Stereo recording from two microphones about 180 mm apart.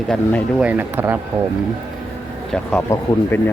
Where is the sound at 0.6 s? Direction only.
10° right (ahead or behind).